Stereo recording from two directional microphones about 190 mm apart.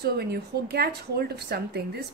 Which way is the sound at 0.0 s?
55° right (ahead or behind).